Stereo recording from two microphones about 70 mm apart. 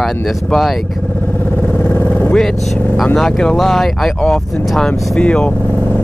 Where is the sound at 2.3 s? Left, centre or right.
Centre.